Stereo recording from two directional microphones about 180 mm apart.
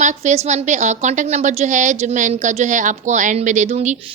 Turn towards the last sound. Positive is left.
turn(degrees=-40)  # may be behind; listen again after turning